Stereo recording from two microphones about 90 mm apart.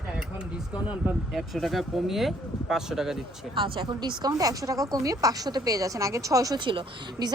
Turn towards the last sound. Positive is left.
turn(degrees=-70)  # may be behind; listen again after turning